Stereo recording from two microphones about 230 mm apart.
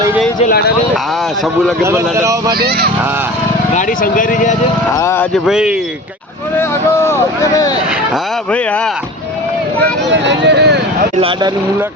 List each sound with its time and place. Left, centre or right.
0.0 s a sound: centre
0.3 s speech: left
1.8 s speech: centre
2.6 s speech: right
3.8 s speech: left
4.9 s speech: centre
5.5 s speech: centre
6.6 s speech: centre
9.8 s speech: right
11.2 s speech: right